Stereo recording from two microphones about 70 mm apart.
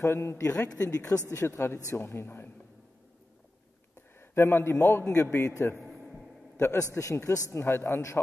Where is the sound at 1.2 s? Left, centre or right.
Left.